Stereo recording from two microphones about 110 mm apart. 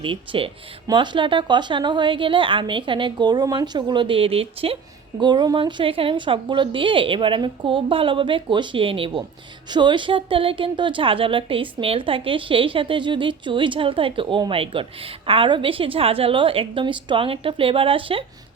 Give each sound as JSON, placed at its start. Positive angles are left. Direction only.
{"t": 0.0, "sound": "a woman's voice", "side_deg": -55}
{"t": 5.2, "sound": "a woman's voice", "side_deg": -40}
{"t": 9.6, "sound": "a woman's voice", "side_deg": -45}